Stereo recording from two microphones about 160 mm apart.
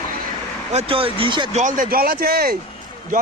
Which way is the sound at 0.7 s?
40° right (ahead or behind).